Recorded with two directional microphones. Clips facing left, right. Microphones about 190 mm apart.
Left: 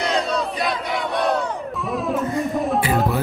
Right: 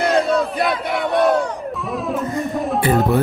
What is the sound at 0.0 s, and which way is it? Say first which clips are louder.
Battle cry: right 5 dB; 55° right (ahead or behind).